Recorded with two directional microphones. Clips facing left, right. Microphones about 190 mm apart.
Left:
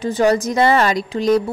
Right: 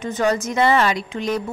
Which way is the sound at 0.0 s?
35° left (ahead or behind).